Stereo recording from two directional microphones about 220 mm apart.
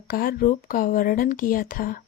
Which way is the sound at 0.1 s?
40° left (ahead or behind).